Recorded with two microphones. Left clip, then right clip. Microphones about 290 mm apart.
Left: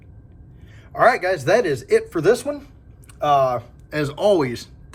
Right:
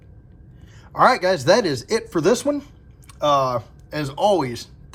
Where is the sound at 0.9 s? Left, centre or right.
Centre.